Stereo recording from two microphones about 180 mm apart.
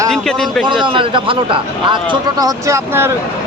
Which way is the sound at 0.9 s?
30° right (ahead or behind).